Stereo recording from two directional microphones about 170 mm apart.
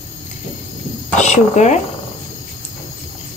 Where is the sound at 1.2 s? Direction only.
45° left (ahead or behind).